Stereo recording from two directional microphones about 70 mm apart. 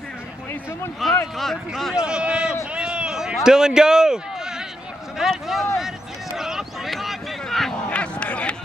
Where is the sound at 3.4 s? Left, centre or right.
Centre.